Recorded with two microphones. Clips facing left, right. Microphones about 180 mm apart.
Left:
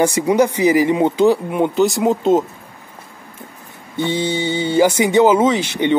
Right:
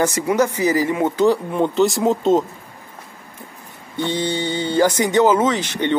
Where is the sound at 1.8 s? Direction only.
Centre (ahead or behind).